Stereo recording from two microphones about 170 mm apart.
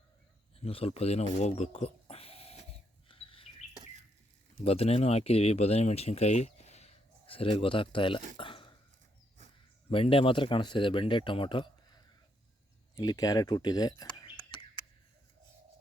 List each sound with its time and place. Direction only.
0.6 s speech: 35° left (ahead or behind)
3.1 s chirp: 35° left (ahead or behind)
4.6 s speech: 35° left (ahead or behind)
8.4 s a sound: 30° left (ahead or behind)
9.9 s speech: 30° left (ahead or behind)